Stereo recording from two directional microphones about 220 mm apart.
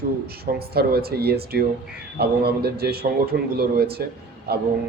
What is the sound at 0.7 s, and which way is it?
A man's voice, 45° right (ahead or behind).